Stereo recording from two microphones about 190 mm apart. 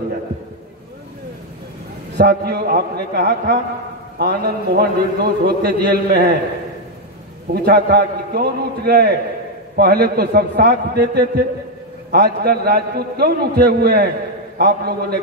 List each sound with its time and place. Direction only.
2.1 s a man's voice: 55° right (ahead or behind)
7.5 s a man's voice: 55° right (ahead or behind)